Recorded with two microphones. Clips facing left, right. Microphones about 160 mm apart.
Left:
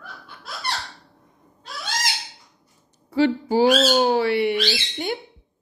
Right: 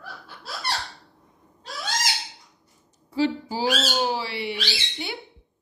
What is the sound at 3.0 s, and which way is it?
Owl, 60° left (ahead or behind).